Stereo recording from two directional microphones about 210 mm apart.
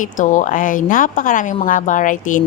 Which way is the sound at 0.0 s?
35° left (ahead or behind).